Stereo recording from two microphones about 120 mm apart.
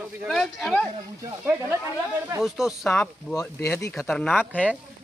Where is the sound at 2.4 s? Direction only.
5° right (ahead or behind).